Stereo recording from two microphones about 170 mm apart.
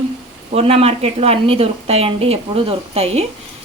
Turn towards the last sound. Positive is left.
turn(degrees=-35)  # may be behind; listen again after turning